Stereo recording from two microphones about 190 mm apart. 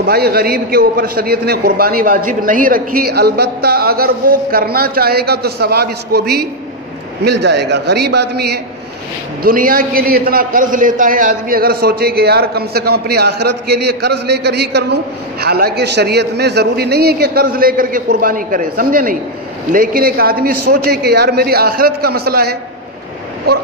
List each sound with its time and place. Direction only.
0.0 s a man's voice: 55° right (ahead or behind)
9.4 s a man's voice: 50° right (ahead or behind)